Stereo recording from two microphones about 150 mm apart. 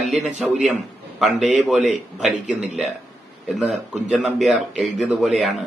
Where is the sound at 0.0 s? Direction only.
Centre (ahead or behind).